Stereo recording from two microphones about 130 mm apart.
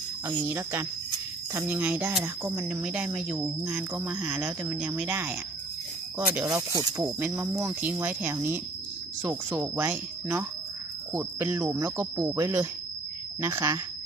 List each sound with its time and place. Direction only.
0.3 s speech: 20° right (ahead or behind)
6.7 s speech: 25° right (ahead or behind)